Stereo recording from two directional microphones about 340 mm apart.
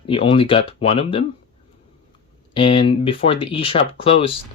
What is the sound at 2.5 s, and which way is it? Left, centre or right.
Speech, centre.